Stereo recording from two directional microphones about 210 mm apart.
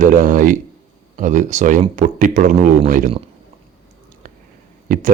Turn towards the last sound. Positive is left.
turn(degrees=-40)  # may be behind; listen again after turning